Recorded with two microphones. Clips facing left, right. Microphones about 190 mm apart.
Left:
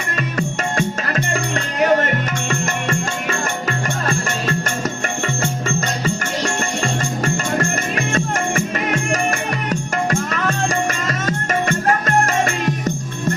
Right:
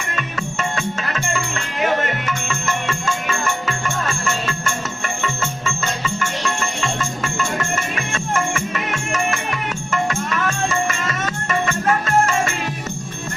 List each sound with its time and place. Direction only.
0.2 s music: 40° left (ahead or behind)